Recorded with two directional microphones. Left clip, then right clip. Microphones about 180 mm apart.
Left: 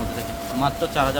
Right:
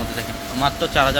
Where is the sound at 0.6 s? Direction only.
15° right (ahead or behind).